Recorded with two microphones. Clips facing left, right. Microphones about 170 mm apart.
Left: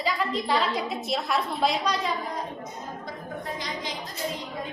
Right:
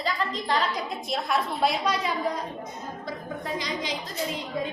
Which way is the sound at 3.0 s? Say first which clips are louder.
Right 4 dB; 90° right.